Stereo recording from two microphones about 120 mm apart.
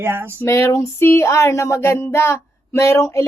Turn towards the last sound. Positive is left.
turn(degrees=25)  # may be behind; listen again after turning